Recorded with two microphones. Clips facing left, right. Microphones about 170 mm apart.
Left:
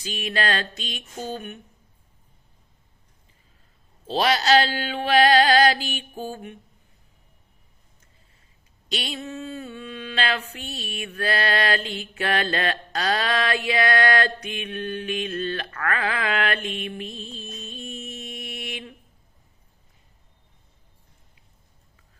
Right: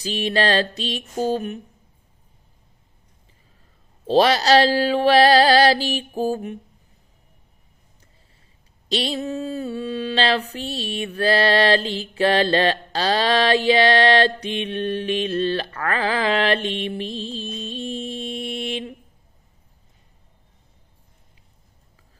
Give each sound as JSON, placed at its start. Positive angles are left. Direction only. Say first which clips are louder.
{"t": 0.0, "sound": "mantra", "louder": "right 6 dB", "side_deg": -35}
{"t": 4.0, "sound": "mantra", "louder": "right 6 dB", "side_deg": -40}
{"t": 8.9, "sound": "mantra", "louder": "right 7 dB", "side_deg": -35}